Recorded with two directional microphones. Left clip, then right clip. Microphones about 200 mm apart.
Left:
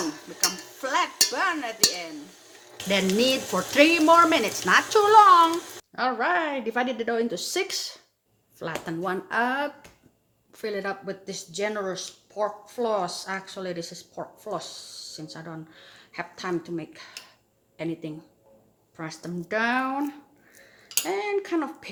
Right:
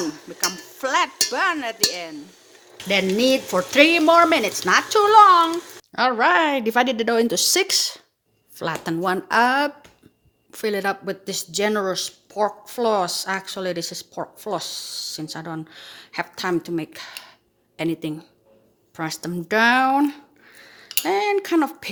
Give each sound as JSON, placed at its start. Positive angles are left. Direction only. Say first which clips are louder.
{"t": 0.3, "sound": "speech", "louder": "right 1 dB", "side_deg": -50}
{"t": 2.8, "sound": "speech", "louder": "right 4 dB", "side_deg": -20}
{"t": 5.9, "sound": "speech", "louder": "right 7 dB", "side_deg": -45}